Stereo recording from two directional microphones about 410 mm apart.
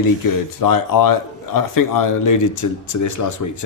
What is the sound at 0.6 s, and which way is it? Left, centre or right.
A man's voice, left.